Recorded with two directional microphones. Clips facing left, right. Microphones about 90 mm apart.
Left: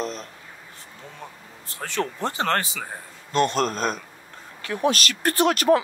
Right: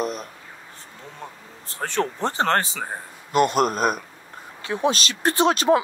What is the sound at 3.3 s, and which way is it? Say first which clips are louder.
Speech: right 3 dB; 10° right (ahead or behind).